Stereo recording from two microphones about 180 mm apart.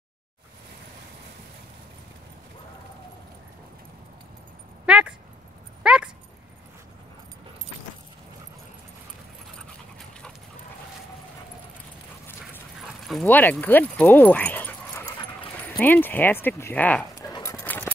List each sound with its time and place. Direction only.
4.8 s a sound: 5° right (ahead or behind)
5.8 s dog: 5° right (ahead or behind)
12.7 s dog: centre (ahead or behind)
15.8 s speech: 10° left (ahead or behind)
17.1 s dog: 20° left (ahead or behind)